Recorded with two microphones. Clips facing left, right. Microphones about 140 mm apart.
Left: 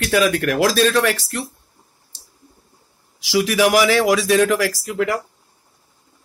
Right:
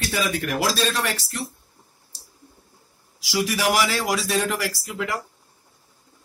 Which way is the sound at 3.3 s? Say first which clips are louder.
Left 6 dB; 80° left.